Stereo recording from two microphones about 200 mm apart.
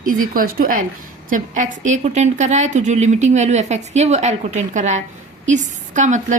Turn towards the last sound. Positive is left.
turn(degrees=-35)  # may be behind; listen again after turning